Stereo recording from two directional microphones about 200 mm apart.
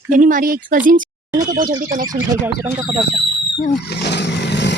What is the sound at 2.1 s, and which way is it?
Speech, 10° right (ahead or behind).